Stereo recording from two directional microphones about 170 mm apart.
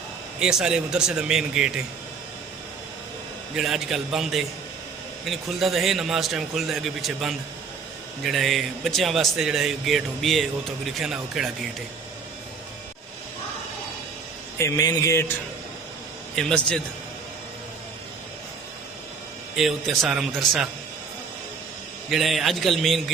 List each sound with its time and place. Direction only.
0.3 s speech: 5° right (ahead or behind)
3.5 s speech: 5° right (ahead or behind)
14.6 s speech: 20° left (ahead or behind)
16.3 s speech: 5° left (ahead or behind)
19.5 s speech: centre (ahead or behind)
22.1 s speech: centre (ahead or behind)